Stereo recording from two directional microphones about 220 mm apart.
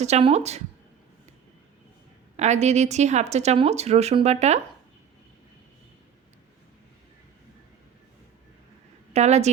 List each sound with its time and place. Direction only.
0.0 s speech: 30° right (ahead or behind)
2.3 s speech: 30° right (ahead or behind)
9.1 s speech: 30° right (ahead or behind)